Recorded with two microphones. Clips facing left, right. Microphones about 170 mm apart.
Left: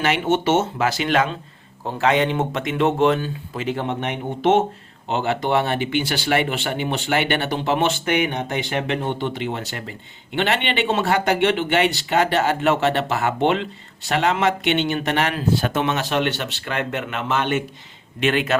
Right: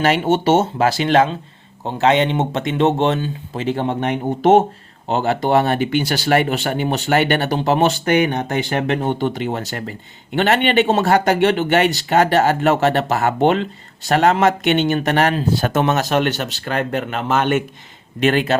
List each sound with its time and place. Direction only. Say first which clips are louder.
0.0 s speech: right 4 dB; 35° right (ahead or behind)
18.2 s speech: right 4 dB; 40° right (ahead or behind)